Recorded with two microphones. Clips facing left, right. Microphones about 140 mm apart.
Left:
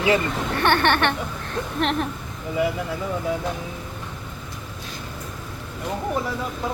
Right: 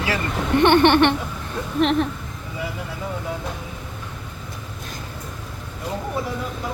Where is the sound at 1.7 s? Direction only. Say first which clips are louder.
Right 5 dB; centre (ahead or behind).